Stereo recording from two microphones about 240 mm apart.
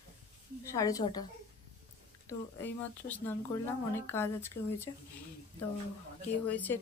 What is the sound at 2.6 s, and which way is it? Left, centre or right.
Speech, centre.